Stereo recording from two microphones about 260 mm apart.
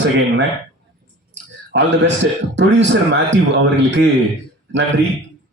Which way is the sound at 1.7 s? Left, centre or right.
Right.